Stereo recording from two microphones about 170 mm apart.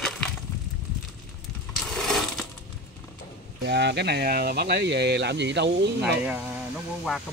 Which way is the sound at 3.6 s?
85° right.